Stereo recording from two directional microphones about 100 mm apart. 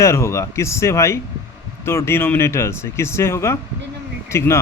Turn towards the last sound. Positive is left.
turn(degrees=25)  # may be behind; listen again after turning